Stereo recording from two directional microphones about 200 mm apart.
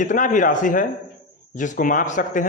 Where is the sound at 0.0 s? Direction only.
40° left (ahead or behind).